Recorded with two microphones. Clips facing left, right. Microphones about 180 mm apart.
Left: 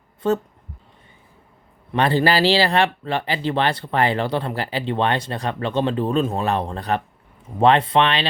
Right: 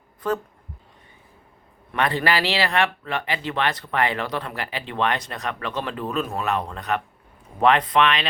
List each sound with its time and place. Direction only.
0.2 s speech: 25° left (ahead or behind)
1.9 s speech: 30° left (ahead or behind)